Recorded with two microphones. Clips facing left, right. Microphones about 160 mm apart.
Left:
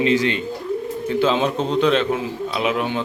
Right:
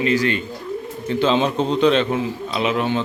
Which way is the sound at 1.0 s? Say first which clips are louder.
Right 1 dB; 5° left (ahead or behind).